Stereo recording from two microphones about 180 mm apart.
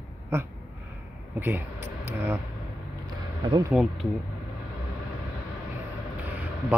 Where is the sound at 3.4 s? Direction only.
25° right (ahead or behind).